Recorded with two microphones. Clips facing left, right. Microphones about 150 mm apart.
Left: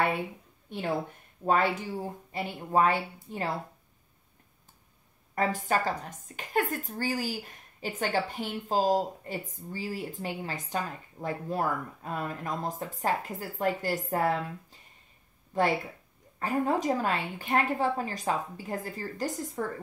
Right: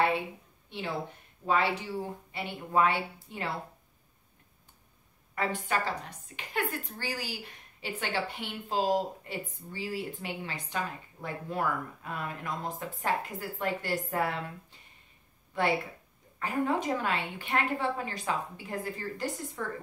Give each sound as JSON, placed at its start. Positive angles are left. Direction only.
{"t": 0.7, "sound": "a woman's voice", "side_deg": 50}
{"t": 5.3, "sound": "a woman's voice", "side_deg": 40}